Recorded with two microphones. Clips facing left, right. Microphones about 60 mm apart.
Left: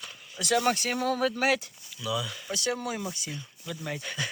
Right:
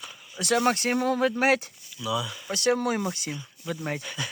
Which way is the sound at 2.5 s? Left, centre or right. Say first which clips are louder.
Right 7 dB; right.